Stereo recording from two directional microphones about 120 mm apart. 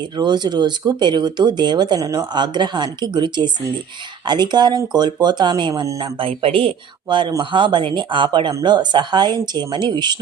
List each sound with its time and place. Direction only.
0.0 s speech: 40° right (ahead or behind)